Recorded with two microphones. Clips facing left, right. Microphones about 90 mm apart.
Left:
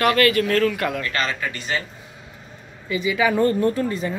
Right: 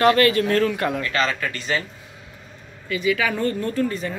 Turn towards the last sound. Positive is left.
turn(degrees=30)  # may be behind; listen again after turning